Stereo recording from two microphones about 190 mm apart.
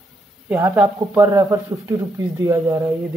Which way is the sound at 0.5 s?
10° right (ahead or behind).